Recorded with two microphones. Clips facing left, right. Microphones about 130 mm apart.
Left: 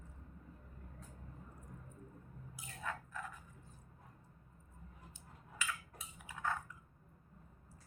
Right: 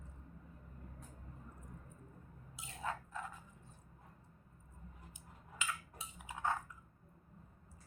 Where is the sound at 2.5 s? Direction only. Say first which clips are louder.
Right 2 dB; 25° right (ahead or behind).